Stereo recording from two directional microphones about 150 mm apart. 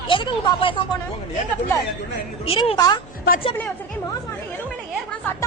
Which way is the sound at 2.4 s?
40° left (ahead or behind).